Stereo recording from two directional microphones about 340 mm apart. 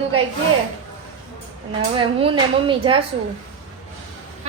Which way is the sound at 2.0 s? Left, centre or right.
Centre.